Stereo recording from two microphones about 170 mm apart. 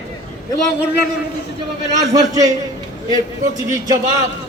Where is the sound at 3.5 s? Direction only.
20° right (ahead or behind).